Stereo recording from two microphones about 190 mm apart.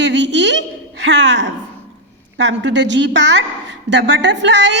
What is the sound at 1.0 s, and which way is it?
A woman's voice, 70° right (ahead or behind).